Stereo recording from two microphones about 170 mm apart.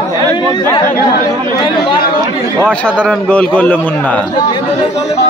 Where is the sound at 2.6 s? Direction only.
5° left (ahead or behind).